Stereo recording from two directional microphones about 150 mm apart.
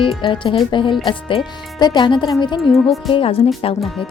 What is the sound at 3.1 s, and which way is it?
Speech, 35° left (ahead or behind).